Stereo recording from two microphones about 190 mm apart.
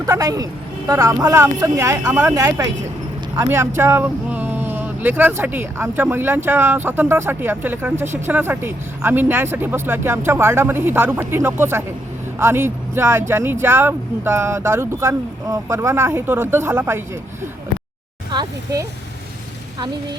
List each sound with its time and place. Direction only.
0.0 s speech: 20° right (ahead or behind)
18.3 s speech: 20° right (ahead or behind)